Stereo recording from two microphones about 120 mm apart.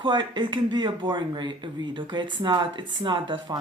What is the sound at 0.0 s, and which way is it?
Speech, 40° right (ahead or behind).